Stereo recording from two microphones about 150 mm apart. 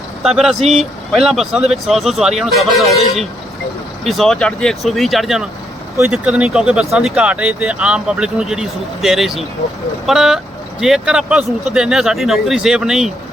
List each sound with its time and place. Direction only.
0.2 s speech: centre (ahead or behind)